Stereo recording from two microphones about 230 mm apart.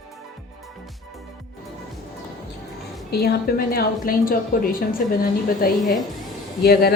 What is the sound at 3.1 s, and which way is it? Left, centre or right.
A woman's voice, left.